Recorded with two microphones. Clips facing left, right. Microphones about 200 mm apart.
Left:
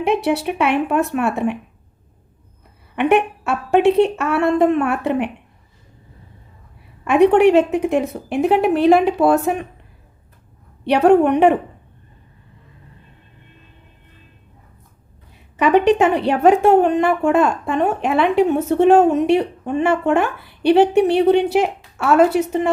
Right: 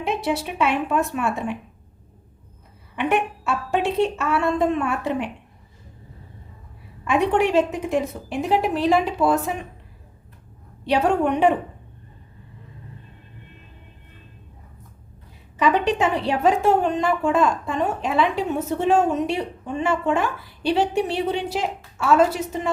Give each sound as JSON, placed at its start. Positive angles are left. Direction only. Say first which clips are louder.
{"t": 0.0, "sound": "a woman's voice", "louder": "left 6 dB", "side_deg": 65}
{"t": 2.9, "sound": "a woman's voice", "louder": "left 6 dB", "side_deg": 60}
{"t": 7.0, "sound": "a woman's voice", "louder": "left 8 dB", "side_deg": 60}
{"t": 10.8, "sound": "a woman's voice", "louder": "left 7 dB", "side_deg": 65}
{"t": 15.5, "sound": "a woman's voice", "louder": "left 6 dB", "side_deg": 65}